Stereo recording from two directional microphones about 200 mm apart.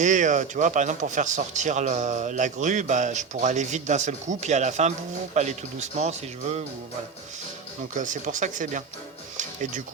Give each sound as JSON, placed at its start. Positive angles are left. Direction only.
{"t": 0.0, "sound": "a man's voice", "side_deg": -40}
{"t": 7.9, "sound": "a man's voice", "side_deg": -40}
{"t": 9.4, "sound": "music", "side_deg": -40}